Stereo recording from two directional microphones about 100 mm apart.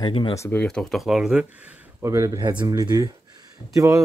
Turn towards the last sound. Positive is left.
turn(degrees=-30)  # may be behind; listen again after turning